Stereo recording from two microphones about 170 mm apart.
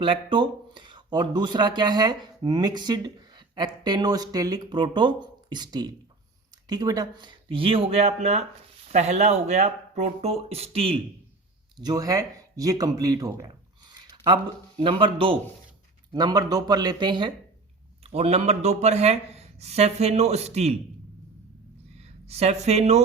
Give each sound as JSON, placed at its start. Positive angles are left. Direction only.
{"t": 0.0, "sound": "speech", "side_deg": -30}
{"t": 11.8, "sound": "speech", "side_deg": -20}
{"t": 14.8, "sound": "speech", "side_deg": -30}
{"t": 22.0, "sound": "speech", "side_deg": -40}